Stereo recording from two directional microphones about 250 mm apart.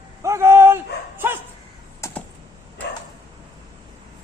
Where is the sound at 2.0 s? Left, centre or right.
Centre.